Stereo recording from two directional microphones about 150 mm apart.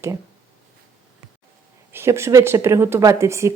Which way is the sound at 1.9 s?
15° right (ahead or behind).